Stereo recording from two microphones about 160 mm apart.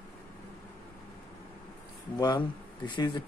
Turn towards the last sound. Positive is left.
turn(degrees=30)  # may be behind; listen again after turning